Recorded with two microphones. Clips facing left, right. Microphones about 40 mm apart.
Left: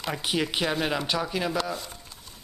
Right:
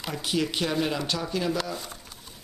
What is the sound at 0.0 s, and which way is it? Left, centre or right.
Speech, centre.